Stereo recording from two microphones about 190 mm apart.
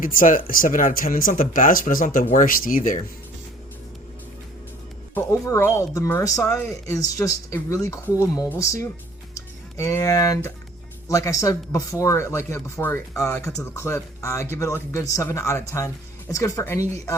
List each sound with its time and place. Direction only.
0.0 s speech: 45° left (ahead or behind)
5.1 s speech: 15° left (ahead or behind)
9.3 s a sound: 15° left (ahead or behind)
11.1 s speech: 15° left (ahead or behind)